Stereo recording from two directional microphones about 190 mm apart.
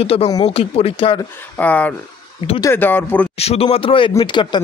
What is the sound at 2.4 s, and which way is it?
Speech, 25° left (ahead or behind).